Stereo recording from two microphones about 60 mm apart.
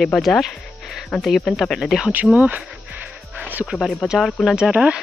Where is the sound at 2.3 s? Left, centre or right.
Right.